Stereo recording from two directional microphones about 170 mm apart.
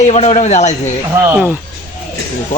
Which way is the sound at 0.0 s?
40° left (ahead or behind).